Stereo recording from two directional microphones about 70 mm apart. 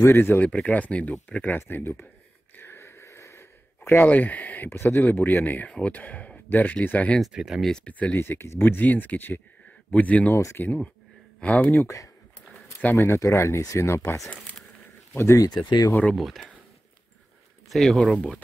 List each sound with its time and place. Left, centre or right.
0.0 s speech: left
0.5 s speech: centre
2.5 s a sound: left
5.7 s speech: centre
7.2 s speech: centre
7.8 s speech: left
8.2 s speech: left
10.3 s speech: left
10.6 s speech: left
12.9 s speech: left
15.4 s speech: left
16.2 s speech: centre
17.6 s speech: centre